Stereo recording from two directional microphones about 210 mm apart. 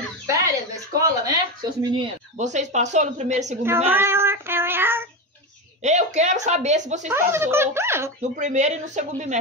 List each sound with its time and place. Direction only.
0.9 s a sound: 15° right (ahead or behind)
2.3 s speech: 35° right (ahead or behind)
3.6 s child singing: 10° right (ahead or behind)
5.8 s speech: 35° right (ahead or behind)
7.1 s speech: 10° right (ahead or behind)
8.2 s speech: 35° right (ahead or behind)